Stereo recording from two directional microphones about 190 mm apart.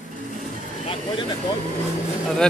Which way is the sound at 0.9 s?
25° left (ahead or behind).